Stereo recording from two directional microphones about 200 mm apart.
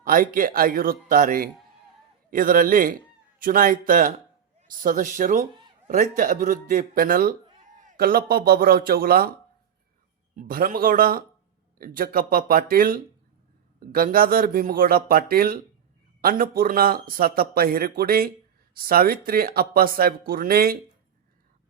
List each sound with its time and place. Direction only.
0.0 s a man's voice: 45° right (ahead or behind)
10.3 s speech: 45° right (ahead or behind)